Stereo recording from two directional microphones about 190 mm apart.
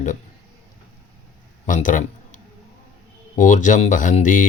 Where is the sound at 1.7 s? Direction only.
45° left (ahead or behind).